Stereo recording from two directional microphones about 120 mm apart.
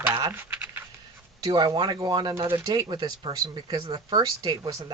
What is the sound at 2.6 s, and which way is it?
Speech, 35° right (ahead or behind).